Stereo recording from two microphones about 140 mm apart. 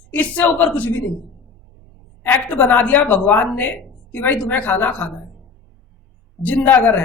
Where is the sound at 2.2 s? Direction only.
10° left (ahead or behind).